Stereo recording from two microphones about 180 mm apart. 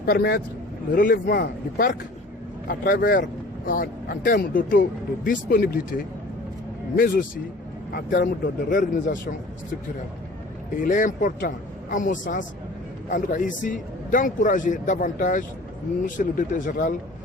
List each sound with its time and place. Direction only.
0.0 s a man's voice: 60° left (ahead or behind)
10.8 s a man's voice: 45° left (ahead or behind)